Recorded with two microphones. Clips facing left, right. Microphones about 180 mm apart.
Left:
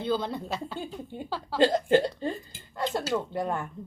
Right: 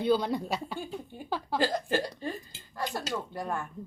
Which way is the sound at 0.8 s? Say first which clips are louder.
Left 2 dB; 20° left (ahead or behind).